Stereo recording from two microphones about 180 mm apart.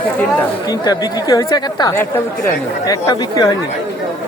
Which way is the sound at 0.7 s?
20° left (ahead or behind).